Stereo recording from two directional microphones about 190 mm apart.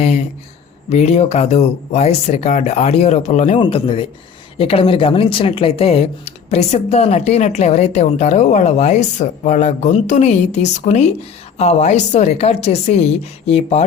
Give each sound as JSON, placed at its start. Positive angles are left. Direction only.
{"t": 0.9, "sound": "speech", "side_deg": 35}